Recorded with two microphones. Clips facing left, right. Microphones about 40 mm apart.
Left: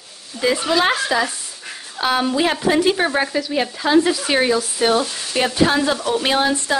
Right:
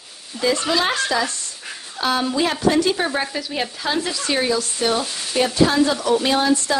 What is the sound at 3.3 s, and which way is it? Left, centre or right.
Speech, centre.